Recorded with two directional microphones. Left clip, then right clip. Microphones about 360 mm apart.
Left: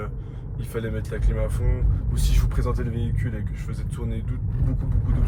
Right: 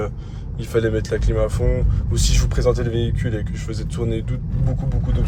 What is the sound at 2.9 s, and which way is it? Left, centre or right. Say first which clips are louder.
Speech: right 9 dB; right.